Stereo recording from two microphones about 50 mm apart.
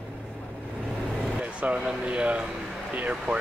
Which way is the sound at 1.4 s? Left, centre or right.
Right.